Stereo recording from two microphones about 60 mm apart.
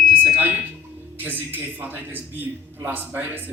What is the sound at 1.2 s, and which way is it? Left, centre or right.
A man's voice, right.